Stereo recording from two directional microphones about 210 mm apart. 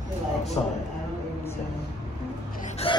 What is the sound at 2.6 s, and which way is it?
Vehicle, 25° left (ahead or behind).